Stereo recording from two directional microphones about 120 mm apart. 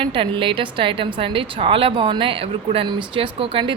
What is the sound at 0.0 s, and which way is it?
Speech, 45° right (ahead or behind).